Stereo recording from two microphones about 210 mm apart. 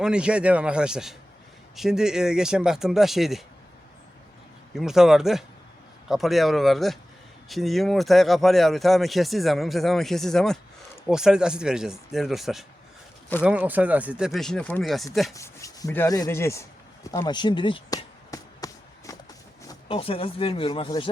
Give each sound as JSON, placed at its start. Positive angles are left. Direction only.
{"t": 0.0, "sound": "speech", "side_deg": -5}
{"t": 4.7, "sound": "speech", "side_deg": 0}
{"t": 15.3, "sound": "speech", "side_deg": 15}
{"t": 17.1, "sound": "basketball bounce", "side_deg": 20}
{"t": 19.6, "sound": "speech", "side_deg": 25}